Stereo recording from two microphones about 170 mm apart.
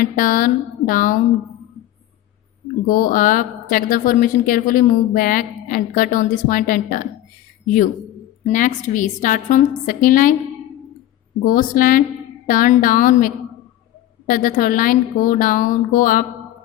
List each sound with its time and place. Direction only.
0.0 s a woman's voice: 55° left (ahead or behind)
2.8 s a woman's voice: 55° left (ahead or behind)
8.4 s a woman's voice: 50° left (ahead or behind)
11.4 s a woman's voice: 55° left (ahead or behind)